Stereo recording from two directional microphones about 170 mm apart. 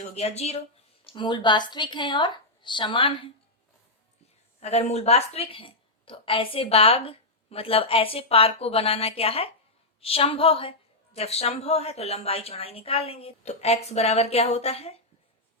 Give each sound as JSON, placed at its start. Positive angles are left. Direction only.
{"t": 0.0, "sound": "a woman's voice", "side_deg": 40}
{"t": 1.0, "sound": "a woman's voice", "side_deg": 30}
{"t": 4.6, "sound": "a woman's voice", "side_deg": 40}